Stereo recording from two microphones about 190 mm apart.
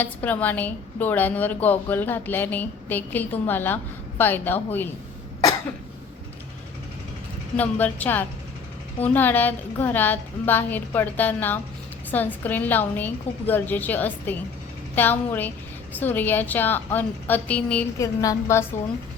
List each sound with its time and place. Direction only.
0.0 s a woman's voice: 10° left (ahead or behind)
7.5 s a woman's voice: 10° left (ahead or behind)